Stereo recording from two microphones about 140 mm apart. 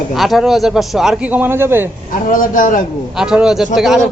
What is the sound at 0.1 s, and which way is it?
A man's voice, centre (ahead or behind).